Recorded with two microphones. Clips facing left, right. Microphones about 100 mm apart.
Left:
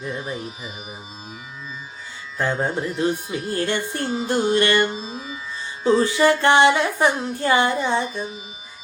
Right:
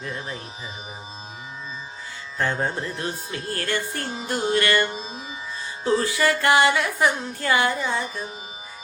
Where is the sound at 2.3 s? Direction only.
15° left (ahead or behind).